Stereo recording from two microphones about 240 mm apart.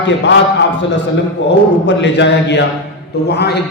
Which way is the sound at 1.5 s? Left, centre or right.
Left.